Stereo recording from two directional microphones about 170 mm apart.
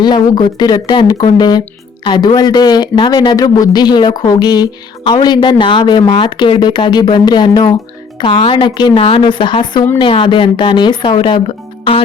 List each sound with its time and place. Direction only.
0.0 s speech: 25° left (ahead or behind)